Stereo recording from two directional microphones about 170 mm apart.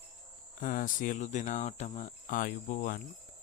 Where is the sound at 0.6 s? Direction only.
50° left (ahead or behind).